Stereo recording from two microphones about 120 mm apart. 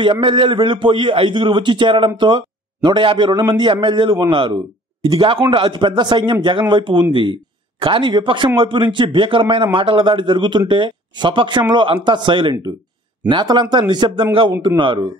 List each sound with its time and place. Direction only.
0.0 s a man's voice: 40° right (ahead or behind)